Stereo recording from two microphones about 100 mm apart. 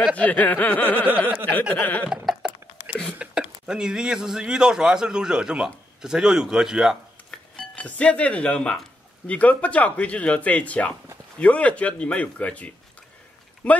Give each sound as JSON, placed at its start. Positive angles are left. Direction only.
{"t": 0.1, "sound": "speech", "side_deg": 15}
{"t": 2.2, "sound": "a sound", "side_deg": -10}
{"t": 3.2, "sound": "a man's voice", "side_deg": -10}
{"t": 7.2, "sound": "speech", "side_deg": 10}